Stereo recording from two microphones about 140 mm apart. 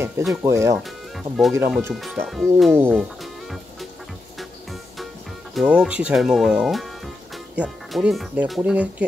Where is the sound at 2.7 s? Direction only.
15° right (ahead or behind).